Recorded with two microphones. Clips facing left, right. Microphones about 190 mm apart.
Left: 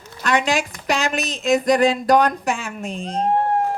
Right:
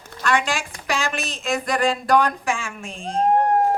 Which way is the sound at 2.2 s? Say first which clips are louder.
Left 2 dB; 40° left (ahead or behind).